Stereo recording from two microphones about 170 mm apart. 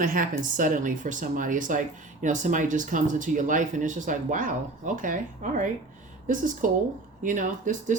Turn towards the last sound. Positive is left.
turn(degrees=-50)  # may be behind; listen again after turning